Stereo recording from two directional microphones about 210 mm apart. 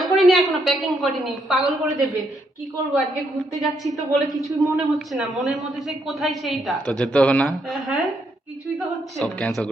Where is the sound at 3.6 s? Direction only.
Centre (ahead or behind).